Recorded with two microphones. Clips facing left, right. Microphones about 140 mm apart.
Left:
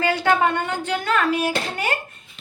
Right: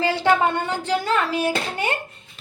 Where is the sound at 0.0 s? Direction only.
30° right (ahead or behind).